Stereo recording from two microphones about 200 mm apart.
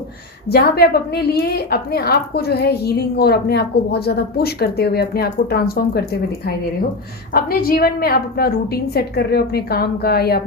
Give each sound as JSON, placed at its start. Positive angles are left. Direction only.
{"t": 0.4, "sound": "a woman's voice", "side_deg": 55}